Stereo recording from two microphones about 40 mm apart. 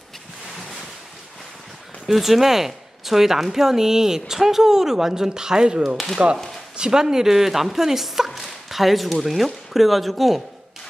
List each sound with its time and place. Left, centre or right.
2.0 s speech: centre